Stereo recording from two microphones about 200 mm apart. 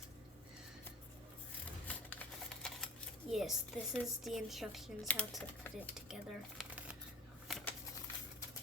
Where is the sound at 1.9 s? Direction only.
5° left (ahead or behind).